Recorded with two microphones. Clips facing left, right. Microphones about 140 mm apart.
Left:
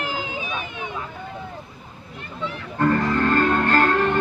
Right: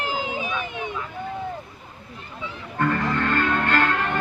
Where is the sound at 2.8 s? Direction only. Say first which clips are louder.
Left 3 dB; 35° left (ahead or behind).